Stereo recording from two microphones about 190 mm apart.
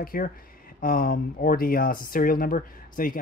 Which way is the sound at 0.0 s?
50° left (ahead or behind).